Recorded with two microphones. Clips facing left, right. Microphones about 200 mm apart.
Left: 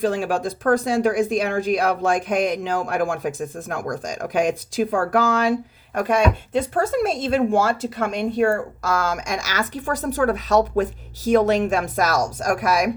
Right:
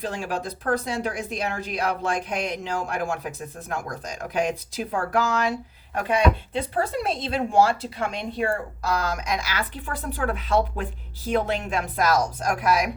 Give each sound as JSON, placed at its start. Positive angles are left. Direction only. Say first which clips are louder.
{"t": 0.0, "sound": "speech", "louder": "left 8 dB", "side_deg": 50}